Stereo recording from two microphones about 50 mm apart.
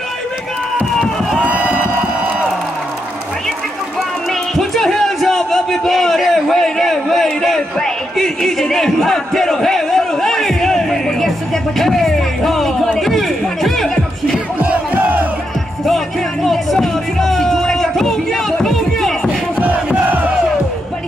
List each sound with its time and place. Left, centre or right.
1.4 s crowd: right
4.3 s a sound: centre
11.8 s music: centre
14.6 s battle cry: right
16.4 s music: centre